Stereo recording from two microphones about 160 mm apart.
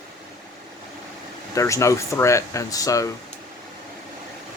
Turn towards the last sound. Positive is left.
turn(degrees=20)  # may be behind; listen again after turning